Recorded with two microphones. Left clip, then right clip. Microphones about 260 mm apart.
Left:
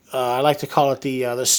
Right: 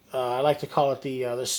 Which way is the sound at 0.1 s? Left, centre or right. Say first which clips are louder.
Left 5 dB; left.